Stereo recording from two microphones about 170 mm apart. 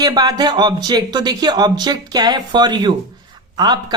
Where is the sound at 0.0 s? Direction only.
25° right (ahead or behind).